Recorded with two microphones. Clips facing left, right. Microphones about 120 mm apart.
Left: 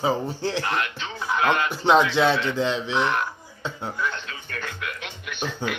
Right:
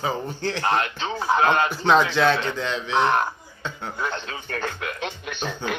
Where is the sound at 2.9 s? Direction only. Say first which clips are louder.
Right 3 dB; 40° right (ahead or behind).